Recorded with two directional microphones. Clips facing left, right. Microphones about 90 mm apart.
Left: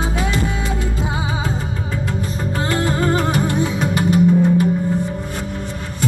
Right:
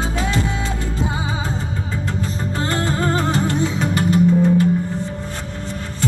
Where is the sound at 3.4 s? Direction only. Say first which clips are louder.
Left 1 dB; 15° left (ahead or behind).